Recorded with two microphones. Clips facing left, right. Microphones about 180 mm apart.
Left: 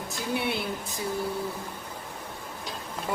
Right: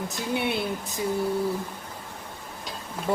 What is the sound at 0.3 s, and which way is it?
Speech, 20° right (ahead or behind).